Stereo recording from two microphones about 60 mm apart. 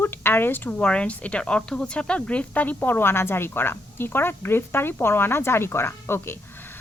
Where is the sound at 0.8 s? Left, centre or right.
Centre.